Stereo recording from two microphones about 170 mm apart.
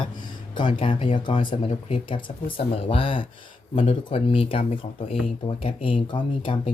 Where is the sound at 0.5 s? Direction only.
30° left (ahead or behind).